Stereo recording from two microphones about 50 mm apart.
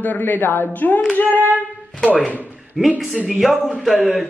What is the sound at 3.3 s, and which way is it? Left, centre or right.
Speech, centre.